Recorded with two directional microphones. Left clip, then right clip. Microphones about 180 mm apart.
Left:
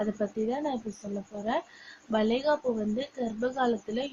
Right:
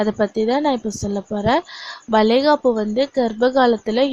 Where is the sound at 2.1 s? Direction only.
50° right (ahead or behind).